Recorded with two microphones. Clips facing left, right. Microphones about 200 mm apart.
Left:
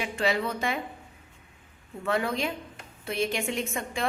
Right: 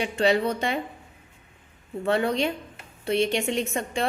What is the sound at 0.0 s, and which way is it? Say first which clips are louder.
Speech: right 5 dB; 30° right (ahead or behind).